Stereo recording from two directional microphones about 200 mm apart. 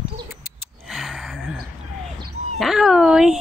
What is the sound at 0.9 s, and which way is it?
Gasp, centre (ahead or behind).